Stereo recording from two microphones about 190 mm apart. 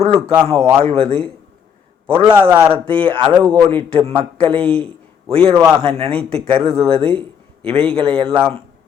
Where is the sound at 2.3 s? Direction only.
10° right (ahead or behind).